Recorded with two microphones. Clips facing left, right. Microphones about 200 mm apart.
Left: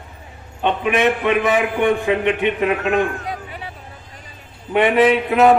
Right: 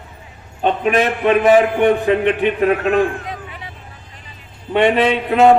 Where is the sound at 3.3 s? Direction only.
35° left (ahead or behind).